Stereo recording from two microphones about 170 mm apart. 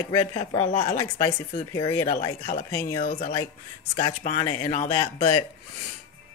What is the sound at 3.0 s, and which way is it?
Speech, 45° left (ahead or behind).